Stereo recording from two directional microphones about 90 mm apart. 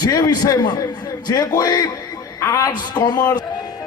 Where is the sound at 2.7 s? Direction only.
50° left (ahead or behind).